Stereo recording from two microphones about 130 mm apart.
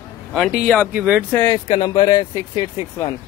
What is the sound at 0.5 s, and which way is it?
Speech, 10° right (ahead or behind).